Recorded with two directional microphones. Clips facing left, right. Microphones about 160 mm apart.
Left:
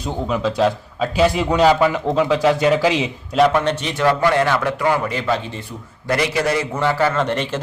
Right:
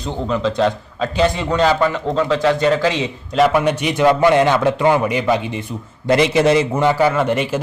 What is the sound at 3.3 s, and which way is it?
A man's voice, 5° right (ahead or behind).